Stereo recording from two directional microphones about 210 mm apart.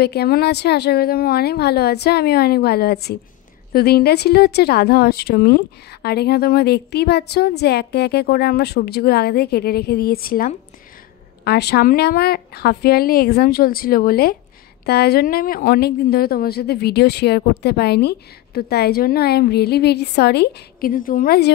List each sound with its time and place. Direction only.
0.0 s speech: 50° left (ahead or behind)